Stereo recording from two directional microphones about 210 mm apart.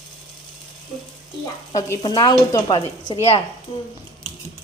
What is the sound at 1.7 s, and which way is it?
Speech, 20° left (ahead or behind).